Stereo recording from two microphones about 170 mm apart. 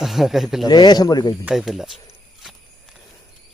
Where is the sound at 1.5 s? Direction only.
Centre (ahead or behind).